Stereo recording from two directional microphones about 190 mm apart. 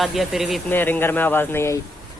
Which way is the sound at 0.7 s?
10° left (ahead or behind).